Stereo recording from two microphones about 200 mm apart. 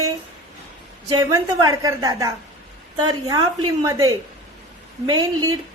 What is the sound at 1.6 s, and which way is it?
Speech, 15° right (ahead or behind).